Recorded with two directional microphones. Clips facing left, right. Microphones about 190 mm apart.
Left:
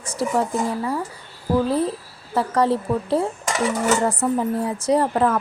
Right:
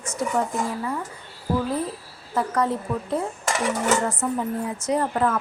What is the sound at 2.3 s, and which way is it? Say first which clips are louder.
A child's voice: left 4 dB; 30° left (ahead or behind).